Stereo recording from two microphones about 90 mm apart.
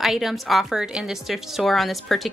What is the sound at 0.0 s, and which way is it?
A woman's voice, 5° right (ahead or behind).